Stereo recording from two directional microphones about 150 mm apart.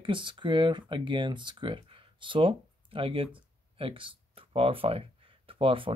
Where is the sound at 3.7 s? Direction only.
35° right (ahead or behind).